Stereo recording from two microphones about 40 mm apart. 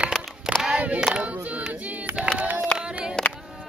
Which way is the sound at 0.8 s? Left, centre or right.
Right.